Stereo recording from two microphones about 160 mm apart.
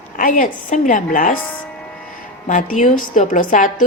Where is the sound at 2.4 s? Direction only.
55° left (ahead or behind).